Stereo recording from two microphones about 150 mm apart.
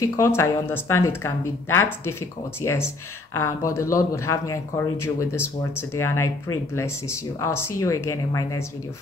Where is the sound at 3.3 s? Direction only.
20° left (ahead or behind).